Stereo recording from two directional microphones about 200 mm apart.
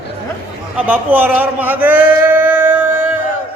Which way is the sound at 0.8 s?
10° right (ahead or behind).